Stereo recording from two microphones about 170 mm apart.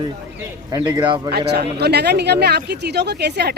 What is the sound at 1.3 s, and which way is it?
Speech, 75° right (ahead or behind).